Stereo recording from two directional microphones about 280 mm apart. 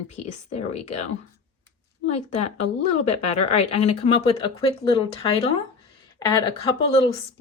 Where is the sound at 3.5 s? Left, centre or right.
Left.